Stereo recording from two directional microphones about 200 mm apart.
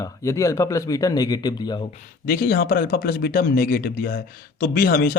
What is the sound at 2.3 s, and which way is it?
Speech, 50° left (ahead or behind).